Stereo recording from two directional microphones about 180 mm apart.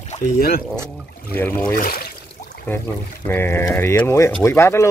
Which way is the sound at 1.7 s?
55° left (ahead or behind).